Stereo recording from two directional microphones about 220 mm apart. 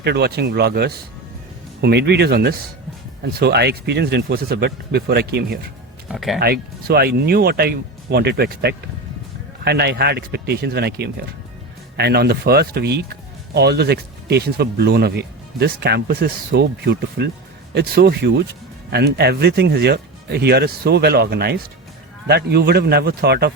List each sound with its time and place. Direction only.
0.0 s speech: 50° right (ahead or behind)
6.1 s speech: centre (ahead or behind)
6.4 s speech: 45° right (ahead or behind)